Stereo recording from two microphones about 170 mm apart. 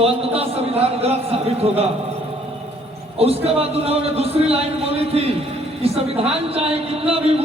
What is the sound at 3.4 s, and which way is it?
A man's voice, 35° right (ahead or behind).